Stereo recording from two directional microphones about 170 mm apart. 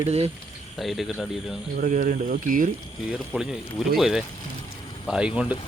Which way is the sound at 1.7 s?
55° right (ahead or behind).